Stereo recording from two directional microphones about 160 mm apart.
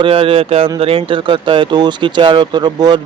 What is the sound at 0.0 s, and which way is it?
Speech, 35° right (ahead or behind).